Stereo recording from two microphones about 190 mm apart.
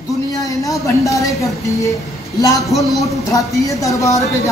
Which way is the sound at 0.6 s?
15° left (ahead or behind).